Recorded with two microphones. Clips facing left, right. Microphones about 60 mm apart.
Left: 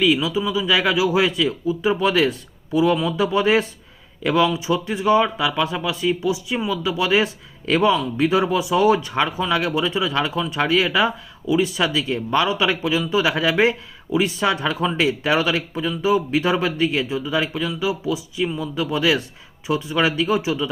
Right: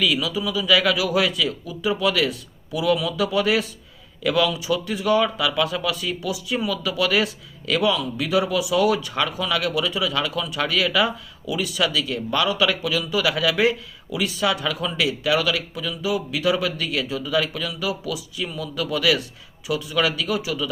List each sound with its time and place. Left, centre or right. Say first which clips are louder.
0.0 s speech: left 4 dB; left